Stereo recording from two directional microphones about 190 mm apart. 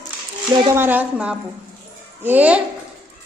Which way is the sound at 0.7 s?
10° right (ahead or behind).